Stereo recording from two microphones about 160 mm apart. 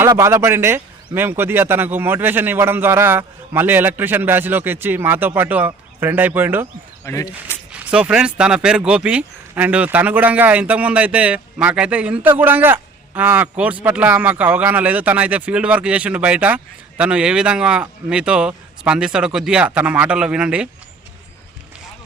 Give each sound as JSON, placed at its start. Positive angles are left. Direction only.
{"t": 0.1, "sound": "speech", "side_deg": -15}
{"t": 7.0, "sound": "speech", "side_deg": 20}
{"t": 7.7, "sound": "speech", "side_deg": -5}